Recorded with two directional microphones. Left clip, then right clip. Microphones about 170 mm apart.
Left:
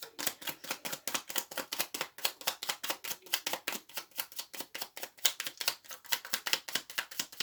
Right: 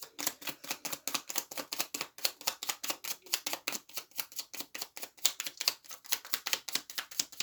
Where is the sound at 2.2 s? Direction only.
20° right (ahead or behind).